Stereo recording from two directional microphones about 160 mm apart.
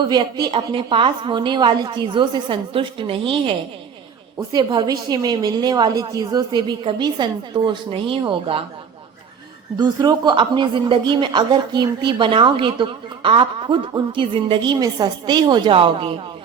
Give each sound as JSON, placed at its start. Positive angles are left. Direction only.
{"t": 0.1, "sound": "a woman's voice", "side_deg": -25}
{"t": 9.7, "sound": "speech", "side_deg": -25}